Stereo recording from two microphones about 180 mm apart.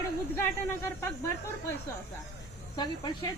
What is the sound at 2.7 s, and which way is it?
Speech, 25° left (ahead or behind).